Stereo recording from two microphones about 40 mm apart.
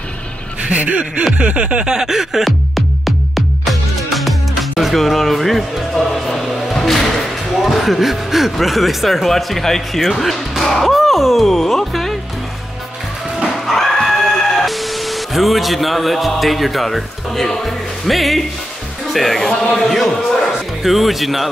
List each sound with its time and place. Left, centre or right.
0.6 s speech: right
1.4 s a sound: right
1.9 s a sound: centre
2.4 s music: centre
7.6 s speech: centre
10.2 s music: centre
10.7 s speech: centre
13.7 s neigh: centre
17.6 s speech: centre
19.3 s speech: centre
20.8 s speech: centre